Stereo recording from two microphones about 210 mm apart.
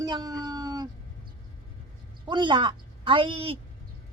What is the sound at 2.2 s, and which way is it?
A woman's voice, 20° right (ahead or behind).